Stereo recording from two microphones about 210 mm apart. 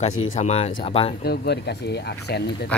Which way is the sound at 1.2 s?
50° left (ahead or behind).